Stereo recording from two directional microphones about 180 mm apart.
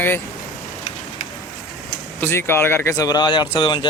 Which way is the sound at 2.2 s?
10° left (ahead or behind).